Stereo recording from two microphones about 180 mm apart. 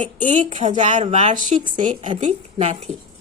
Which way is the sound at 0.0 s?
45° right (ahead or behind).